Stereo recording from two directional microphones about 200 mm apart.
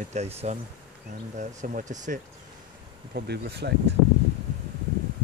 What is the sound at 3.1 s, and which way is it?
Speech, 50° right (ahead or behind).